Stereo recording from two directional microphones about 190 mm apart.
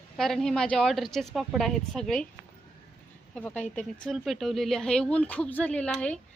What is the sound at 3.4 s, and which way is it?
Speech, 5° left (ahead or behind).